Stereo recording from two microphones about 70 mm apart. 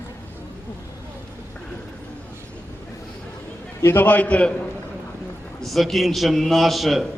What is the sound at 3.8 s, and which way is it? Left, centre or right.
Speech, left.